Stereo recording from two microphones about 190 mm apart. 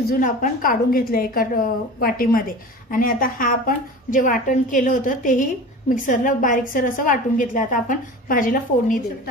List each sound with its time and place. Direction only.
0.1 s a woman's voice: 45° left (ahead or behind)